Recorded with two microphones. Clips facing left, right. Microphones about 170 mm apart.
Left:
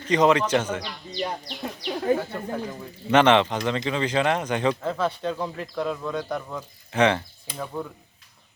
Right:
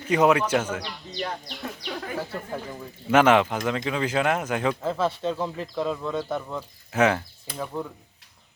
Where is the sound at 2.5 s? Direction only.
5° right (ahead or behind).